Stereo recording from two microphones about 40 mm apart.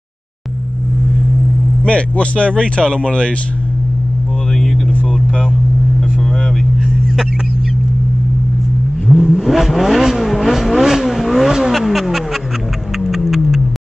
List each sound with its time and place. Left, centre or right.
1.9 s speech: left
9.0 s vehicle: centre
11.7 s a sound: centre
13.0 s music: centre